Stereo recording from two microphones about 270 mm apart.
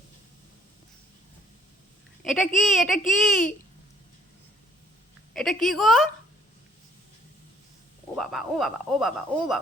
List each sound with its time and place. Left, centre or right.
2.2 s speech: centre
5.3 s speech: centre
8.1 s speech: centre